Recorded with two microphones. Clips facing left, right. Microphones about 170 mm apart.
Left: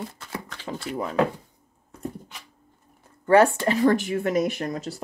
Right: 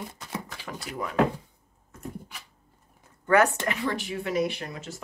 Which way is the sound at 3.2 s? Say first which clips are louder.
Left 5 dB; 30° left (ahead or behind).